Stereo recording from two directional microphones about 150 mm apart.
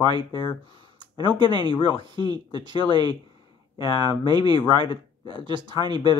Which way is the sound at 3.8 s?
35° left (ahead or behind).